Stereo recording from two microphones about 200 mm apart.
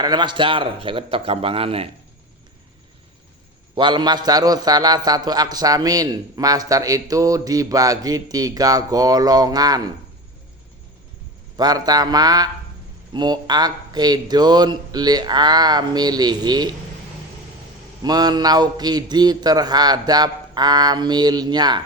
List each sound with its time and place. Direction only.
0.0 s a man's voice: 20° right (ahead or behind)
3.8 s a man's voice: 20° right (ahead or behind)
11.5 s a man's voice: 20° right (ahead or behind)
18.0 s a man's voice: 20° right (ahead or behind)